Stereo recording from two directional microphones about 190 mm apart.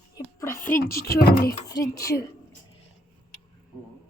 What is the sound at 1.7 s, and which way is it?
Speech, 20° left (ahead or behind).